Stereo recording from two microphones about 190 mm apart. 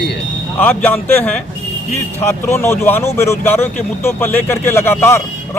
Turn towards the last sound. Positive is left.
turn(degrees=15)  # may be behind; listen again after turning